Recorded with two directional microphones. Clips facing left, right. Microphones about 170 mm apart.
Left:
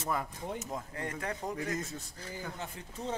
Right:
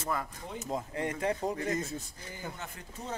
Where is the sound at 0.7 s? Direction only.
20° right (ahead or behind).